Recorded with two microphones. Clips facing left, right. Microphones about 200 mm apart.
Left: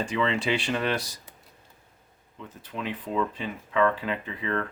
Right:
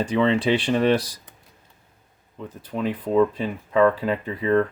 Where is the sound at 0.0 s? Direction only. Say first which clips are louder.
Right 7 dB; 35° right (ahead or behind).